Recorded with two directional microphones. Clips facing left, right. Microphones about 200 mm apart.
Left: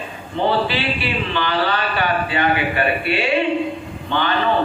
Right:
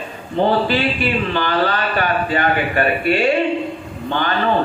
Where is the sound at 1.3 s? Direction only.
45° right (ahead or behind).